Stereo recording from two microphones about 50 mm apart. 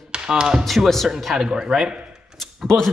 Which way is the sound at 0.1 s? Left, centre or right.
Centre.